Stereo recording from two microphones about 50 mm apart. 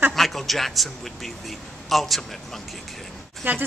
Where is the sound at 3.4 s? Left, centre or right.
Right.